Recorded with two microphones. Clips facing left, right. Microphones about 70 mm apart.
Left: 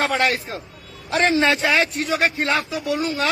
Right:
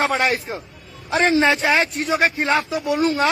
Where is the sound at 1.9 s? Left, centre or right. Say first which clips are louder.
Right 2 dB; centre.